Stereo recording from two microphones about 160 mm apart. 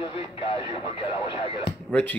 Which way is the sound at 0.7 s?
35° left (ahead or behind).